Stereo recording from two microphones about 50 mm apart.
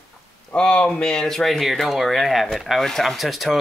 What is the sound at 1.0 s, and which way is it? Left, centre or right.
Speech, centre.